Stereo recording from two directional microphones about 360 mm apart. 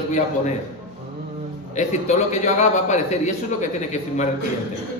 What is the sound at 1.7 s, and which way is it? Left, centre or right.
A man's voice, centre.